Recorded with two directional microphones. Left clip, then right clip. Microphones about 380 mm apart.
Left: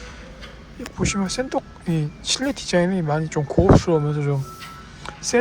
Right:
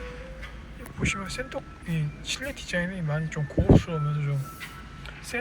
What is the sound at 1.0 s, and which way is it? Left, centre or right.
Speech, centre.